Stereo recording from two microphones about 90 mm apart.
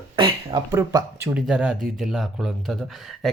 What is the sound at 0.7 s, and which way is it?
Speech, 40° right (ahead or behind).